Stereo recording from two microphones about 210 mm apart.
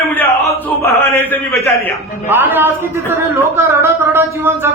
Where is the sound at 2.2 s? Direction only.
10° right (ahead or behind).